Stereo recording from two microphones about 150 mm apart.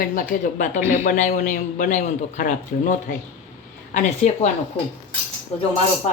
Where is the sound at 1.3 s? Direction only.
75° left (ahead or behind); by 4.5 s 50° left (ahead or behind).